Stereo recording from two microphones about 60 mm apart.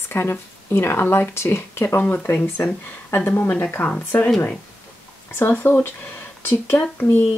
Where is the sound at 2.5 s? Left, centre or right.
Left.